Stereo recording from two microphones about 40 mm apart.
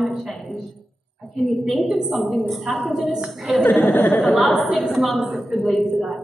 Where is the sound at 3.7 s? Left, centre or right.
Left.